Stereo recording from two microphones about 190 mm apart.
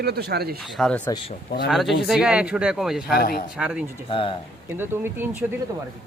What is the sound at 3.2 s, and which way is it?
Speech, 50° left (ahead or behind).